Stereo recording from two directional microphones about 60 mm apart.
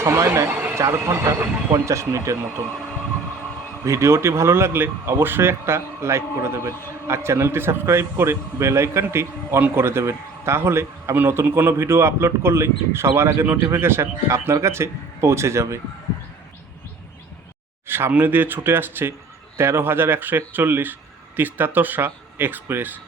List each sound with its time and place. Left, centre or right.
0.8 s speech: right
3.8 s speech: right
11.8 s speech: right
14.3 s speech: right
17.8 s speech: right